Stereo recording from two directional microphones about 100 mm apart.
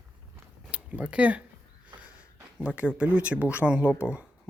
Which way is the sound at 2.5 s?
10° right (ahead or behind).